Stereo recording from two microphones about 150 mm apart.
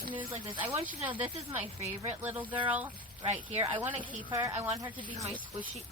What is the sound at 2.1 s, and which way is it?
Speech, 10° right (ahead or behind).